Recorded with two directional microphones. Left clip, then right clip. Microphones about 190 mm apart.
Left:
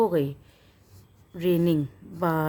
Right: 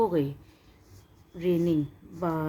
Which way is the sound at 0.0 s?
35° left (ahead or behind).